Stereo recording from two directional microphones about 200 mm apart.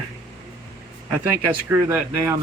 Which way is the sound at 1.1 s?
15° right (ahead or behind).